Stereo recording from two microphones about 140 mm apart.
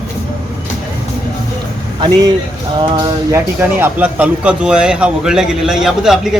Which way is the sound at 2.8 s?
35° right (ahead or behind).